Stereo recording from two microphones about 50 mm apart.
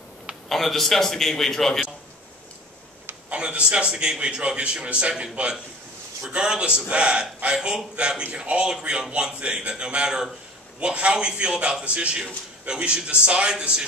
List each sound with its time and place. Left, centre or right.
0.5 s a man's voice: centre
3.3 s a man's voice: right